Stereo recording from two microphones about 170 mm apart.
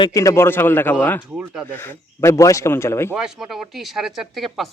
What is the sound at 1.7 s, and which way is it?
A man's voice, 10° left (ahead or behind).